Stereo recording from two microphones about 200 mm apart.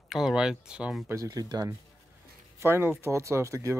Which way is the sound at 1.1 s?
15° right (ahead or behind).